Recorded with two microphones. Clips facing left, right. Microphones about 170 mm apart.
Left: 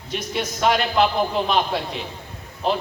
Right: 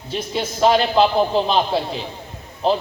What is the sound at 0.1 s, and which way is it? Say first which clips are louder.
A man's voice: right 2 dB; 30° right (ahead or behind).